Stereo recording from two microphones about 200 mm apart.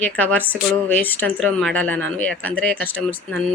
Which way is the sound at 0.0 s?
5° left (ahead or behind).